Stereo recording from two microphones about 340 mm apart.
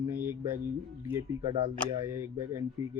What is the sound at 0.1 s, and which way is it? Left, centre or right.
Speech, centre.